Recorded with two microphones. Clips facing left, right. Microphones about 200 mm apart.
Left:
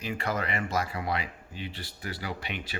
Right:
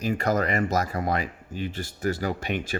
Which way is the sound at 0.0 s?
40° right (ahead or behind).